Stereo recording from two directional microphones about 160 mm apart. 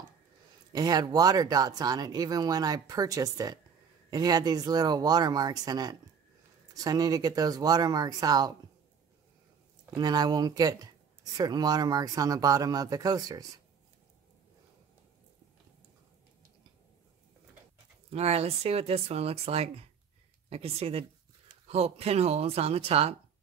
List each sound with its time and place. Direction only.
0.7 s speech: 25° right (ahead or behind)
9.9 s speech: 25° right (ahead or behind)
18.1 s speech: 40° right (ahead or behind)